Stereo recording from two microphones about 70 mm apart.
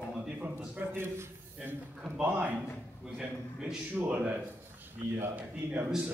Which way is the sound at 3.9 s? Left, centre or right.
Right.